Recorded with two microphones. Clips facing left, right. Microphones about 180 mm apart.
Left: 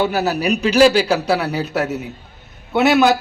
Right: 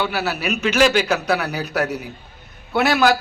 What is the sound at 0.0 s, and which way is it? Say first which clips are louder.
A man's voice: left 5 dB; 40° left (ahead or behind).